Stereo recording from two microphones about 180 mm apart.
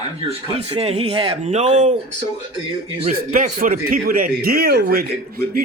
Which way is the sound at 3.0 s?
45° right (ahead or behind).